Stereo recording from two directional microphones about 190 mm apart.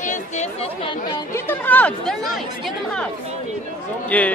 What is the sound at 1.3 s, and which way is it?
Speech, 10° left (ahead or behind).